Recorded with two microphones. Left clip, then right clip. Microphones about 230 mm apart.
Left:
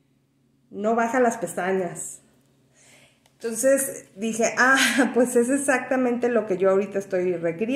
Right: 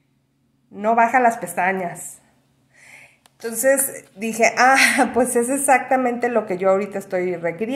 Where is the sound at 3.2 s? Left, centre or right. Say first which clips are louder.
Right 3 dB; right.